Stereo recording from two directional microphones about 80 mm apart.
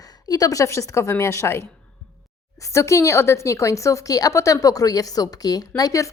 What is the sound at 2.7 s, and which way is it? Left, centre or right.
A woman's voice, left.